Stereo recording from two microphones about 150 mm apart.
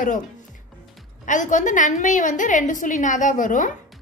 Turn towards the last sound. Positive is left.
turn(degrees=60)  # may be behind; listen again after turning